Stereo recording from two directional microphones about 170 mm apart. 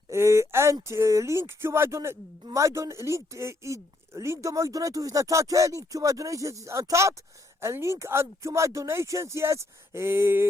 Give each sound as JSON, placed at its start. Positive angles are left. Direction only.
{"t": 0.1, "sound": "speech", "side_deg": -15}